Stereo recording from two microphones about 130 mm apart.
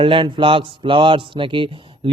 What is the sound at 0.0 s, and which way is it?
Speech, 40° right (ahead or behind).